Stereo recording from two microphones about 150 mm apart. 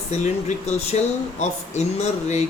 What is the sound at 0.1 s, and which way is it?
Speech, 50° left (ahead or behind).